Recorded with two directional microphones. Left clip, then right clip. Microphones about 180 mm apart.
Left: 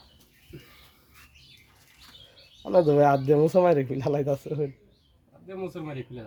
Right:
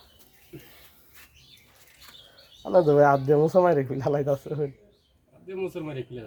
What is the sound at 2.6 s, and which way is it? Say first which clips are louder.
Speech: right 1 dB; 5° left (ahead or behind).